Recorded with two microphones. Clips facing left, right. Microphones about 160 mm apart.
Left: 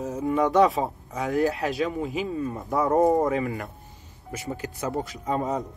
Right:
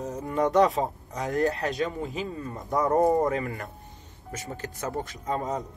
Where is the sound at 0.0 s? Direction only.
5° left (ahead or behind).